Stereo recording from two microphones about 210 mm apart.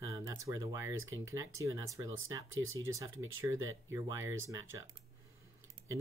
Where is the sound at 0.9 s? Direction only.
70° right (ahead or behind).